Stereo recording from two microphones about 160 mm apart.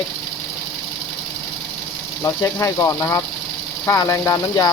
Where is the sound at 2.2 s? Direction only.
20° left (ahead or behind).